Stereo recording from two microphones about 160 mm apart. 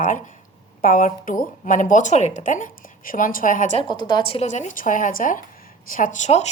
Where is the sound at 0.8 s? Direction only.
55° left (ahead or behind).